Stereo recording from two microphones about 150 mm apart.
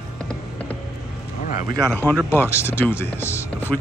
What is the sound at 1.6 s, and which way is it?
Speech, 25° right (ahead or behind).